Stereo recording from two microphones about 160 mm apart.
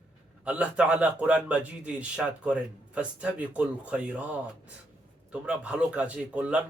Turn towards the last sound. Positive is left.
turn(degrees=-10)  # may be behind; listen again after turning